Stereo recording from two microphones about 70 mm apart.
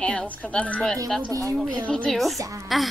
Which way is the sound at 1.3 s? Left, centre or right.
Right.